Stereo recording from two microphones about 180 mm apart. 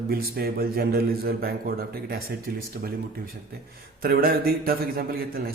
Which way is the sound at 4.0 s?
55° right (ahead or behind).